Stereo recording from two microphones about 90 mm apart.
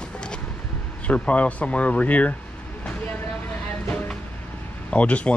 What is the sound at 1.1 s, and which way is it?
Speech, 15° left (ahead or behind).